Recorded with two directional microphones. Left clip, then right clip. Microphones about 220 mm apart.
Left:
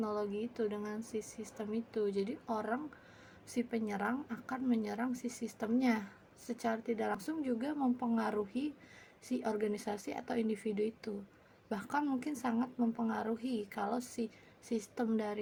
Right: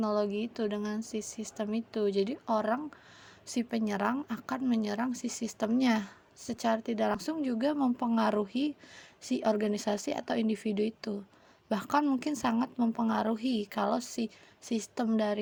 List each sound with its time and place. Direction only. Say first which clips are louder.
0.0 s speech: right 7 dB; 35° right (ahead or behind)